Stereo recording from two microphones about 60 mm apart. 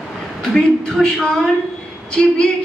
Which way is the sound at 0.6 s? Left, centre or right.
Centre.